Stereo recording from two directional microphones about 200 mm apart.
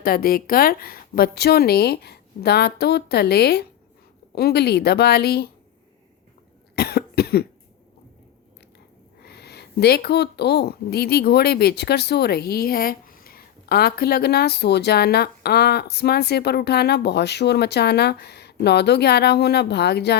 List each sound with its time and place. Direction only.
0.0 s speech: 45° left (ahead or behind)
6.7 s cough: 55° left (ahead or behind)
9.2 s speech: 55° left (ahead or behind)